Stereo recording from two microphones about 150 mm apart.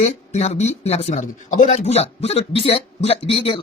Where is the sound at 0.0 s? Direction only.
45° left (ahead or behind).